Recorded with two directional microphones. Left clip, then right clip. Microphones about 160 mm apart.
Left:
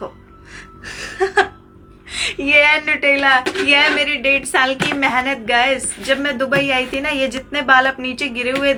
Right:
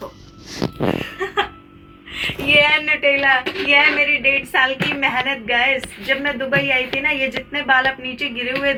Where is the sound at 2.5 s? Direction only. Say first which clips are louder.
Left 1 dB; 35° left (ahead or behind).